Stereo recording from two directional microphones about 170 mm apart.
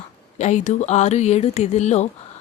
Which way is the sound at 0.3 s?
45° left (ahead or behind).